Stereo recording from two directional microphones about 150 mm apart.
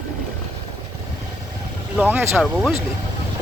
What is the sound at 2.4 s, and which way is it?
Speech, centre (ahead or behind).